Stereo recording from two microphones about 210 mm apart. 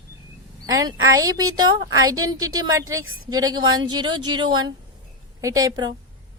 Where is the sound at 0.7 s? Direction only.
15° right (ahead or behind).